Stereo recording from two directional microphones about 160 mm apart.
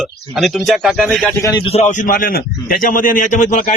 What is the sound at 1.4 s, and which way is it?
Speech, 20° left (ahead or behind).